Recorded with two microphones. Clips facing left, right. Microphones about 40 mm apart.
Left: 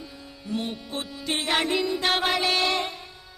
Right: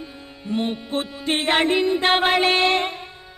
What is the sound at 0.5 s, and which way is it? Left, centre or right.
Mantra, right.